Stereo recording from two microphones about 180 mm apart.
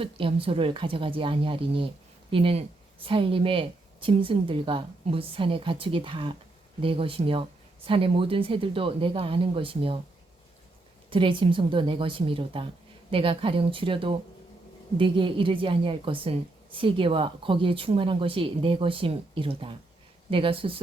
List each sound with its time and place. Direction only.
0.0 s a woman's voice: 30° right (ahead or behind)
11.1 s a woman's voice: 30° right (ahead or behind)